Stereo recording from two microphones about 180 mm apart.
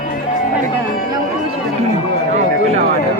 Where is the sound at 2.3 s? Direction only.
40° right (ahead or behind).